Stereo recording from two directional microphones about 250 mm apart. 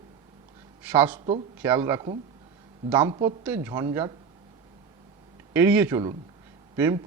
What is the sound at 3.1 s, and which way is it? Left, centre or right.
A man's voice, centre.